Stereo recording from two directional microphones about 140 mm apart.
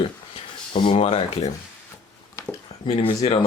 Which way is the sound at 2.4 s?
20° left (ahead or behind).